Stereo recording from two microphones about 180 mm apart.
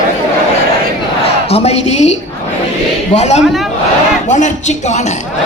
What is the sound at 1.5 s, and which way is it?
A man's voice, 35° left (ahead or behind).